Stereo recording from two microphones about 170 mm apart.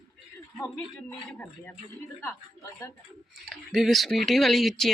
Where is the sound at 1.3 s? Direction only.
10° left (ahead or behind).